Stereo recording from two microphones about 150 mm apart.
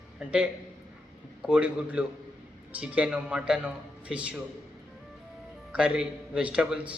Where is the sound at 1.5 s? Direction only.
10° right (ahead or behind).